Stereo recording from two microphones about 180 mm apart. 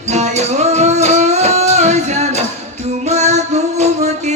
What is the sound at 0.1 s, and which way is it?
Music, 40° right (ahead or behind).